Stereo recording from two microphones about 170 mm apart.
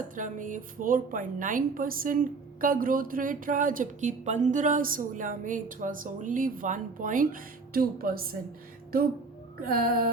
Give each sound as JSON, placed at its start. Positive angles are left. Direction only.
{"t": 0.2, "sound": "a woman's voice", "side_deg": -50}
{"t": 9.6, "sound": "music", "side_deg": -60}